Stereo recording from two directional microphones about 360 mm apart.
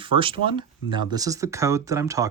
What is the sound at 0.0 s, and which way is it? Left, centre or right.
Speech, centre.